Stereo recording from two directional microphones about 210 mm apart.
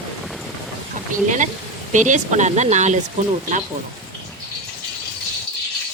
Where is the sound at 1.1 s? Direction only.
35° right (ahead or behind).